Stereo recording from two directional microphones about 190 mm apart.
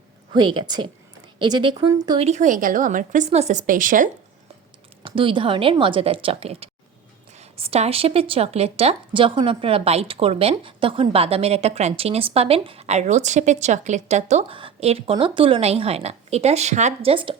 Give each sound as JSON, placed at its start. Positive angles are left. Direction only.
{"t": 0.3, "sound": "a woman's voice", "side_deg": -25}
{"t": 2.2, "sound": "a woman's voice", "side_deg": -40}
{"t": 5.0, "sound": "a woman's voice", "side_deg": -25}